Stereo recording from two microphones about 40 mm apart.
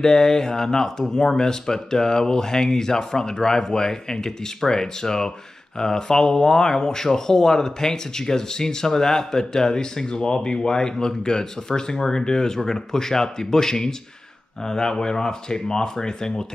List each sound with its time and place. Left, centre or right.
0.0 s speech: centre